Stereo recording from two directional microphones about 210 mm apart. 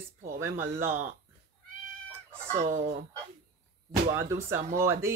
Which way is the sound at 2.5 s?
35° right (ahead or behind).